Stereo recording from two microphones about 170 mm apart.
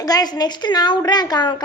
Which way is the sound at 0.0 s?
25° left (ahead or behind).